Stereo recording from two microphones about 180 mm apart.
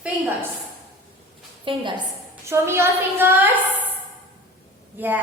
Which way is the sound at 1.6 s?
25° right (ahead or behind).